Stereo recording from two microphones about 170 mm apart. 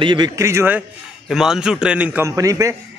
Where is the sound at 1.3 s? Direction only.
5° right (ahead or behind); by 2.7 s 20° right (ahead or behind).